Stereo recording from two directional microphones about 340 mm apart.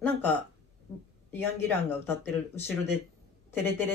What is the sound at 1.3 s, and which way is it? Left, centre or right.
Speech, centre.